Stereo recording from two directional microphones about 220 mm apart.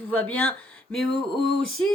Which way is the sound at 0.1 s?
5° left (ahead or behind).